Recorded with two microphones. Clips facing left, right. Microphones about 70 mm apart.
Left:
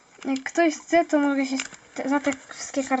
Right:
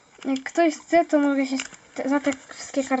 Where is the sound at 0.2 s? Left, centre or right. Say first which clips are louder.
Right 1 dB; centre.